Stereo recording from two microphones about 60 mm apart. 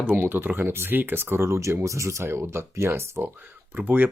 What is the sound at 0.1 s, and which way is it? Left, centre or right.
Speech, right.